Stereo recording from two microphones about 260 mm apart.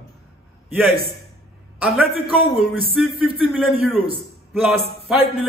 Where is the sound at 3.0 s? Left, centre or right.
Centre.